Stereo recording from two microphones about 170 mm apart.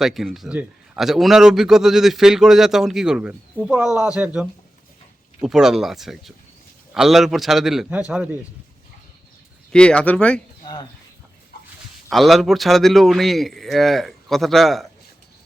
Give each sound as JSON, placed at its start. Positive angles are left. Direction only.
{"t": 0.0, "sound": "a man's voice", "side_deg": 0}
{"t": 9.7, "sound": "speech", "side_deg": 5}
{"t": 10.6, "sound": "a sound", "side_deg": 25}
{"t": 12.0, "sound": "a man's voice", "side_deg": 0}